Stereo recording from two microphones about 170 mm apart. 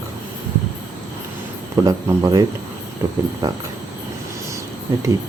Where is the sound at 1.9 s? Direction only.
20° right (ahead or behind).